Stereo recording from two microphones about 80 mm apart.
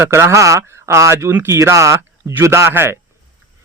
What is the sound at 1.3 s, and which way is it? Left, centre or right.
Speech, right.